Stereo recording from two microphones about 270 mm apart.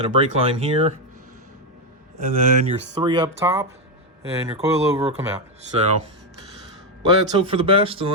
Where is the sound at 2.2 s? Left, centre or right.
Right.